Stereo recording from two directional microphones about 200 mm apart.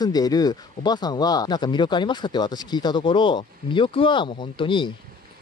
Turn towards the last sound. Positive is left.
turn(degrees=25)  # may be behind; listen again after turning